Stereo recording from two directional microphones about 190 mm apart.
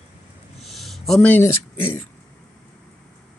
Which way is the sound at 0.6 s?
Centre (ahead or behind).